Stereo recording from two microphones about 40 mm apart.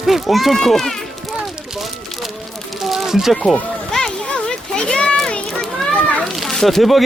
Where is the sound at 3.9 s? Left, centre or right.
Centre.